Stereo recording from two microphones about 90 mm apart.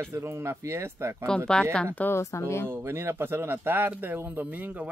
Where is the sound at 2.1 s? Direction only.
30° left (ahead or behind).